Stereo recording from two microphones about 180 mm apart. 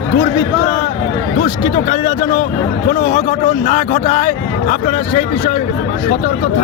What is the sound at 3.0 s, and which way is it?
Speech, 45° left (ahead or behind).